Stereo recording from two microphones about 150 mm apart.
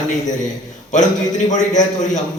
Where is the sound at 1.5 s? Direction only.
55° left (ahead or behind).